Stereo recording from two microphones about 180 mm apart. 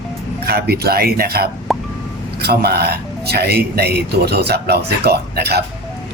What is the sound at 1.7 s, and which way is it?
Music, centre (ahead or behind).